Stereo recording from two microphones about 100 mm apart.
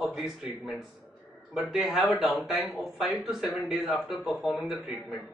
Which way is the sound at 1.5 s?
Centre (ahead or behind).